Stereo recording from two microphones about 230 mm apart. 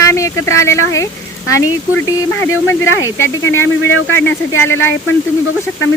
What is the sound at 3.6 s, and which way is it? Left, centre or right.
Speech, left.